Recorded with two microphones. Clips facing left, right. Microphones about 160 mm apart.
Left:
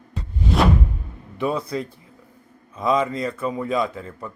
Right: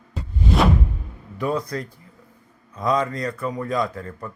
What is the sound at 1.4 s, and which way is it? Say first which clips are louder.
Speech: even; 25° left (ahead or behind).